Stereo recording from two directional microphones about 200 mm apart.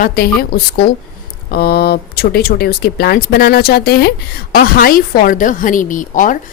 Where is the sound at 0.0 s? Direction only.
50° left (ahead or behind).